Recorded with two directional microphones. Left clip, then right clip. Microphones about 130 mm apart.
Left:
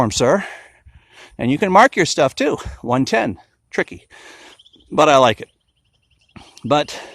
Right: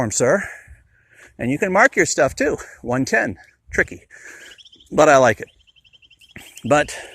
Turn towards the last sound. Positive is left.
turn(degrees=20)  # may be behind; listen again after turning